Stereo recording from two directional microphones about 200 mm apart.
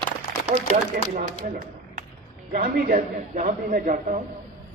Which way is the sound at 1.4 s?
40° right (ahead or behind).